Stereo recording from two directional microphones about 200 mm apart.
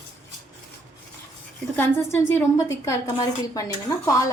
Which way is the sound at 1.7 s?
10° left (ahead or behind).